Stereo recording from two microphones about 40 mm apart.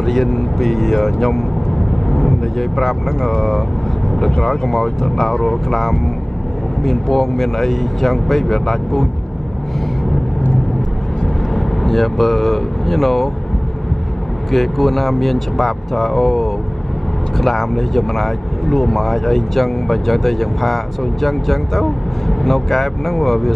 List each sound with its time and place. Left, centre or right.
0.0 s speech: centre
2.0 s vehicle: centre
2.8 s speech: centre
6.8 s speech: centre
11.5 s speech: centre
14.5 s speech: centre